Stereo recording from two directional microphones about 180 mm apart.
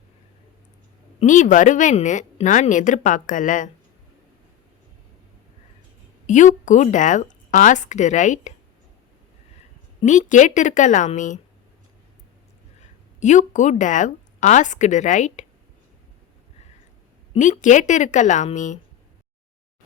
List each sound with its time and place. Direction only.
1.2 s speech: 45° left (ahead or behind)
6.2 s speech: 45° left (ahead or behind)
10.0 s speech: 40° left (ahead or behind)
13.1 s speech: 40° left (ahead or behind)
17.3 s a woman's voice: 40° left (ahead or behind)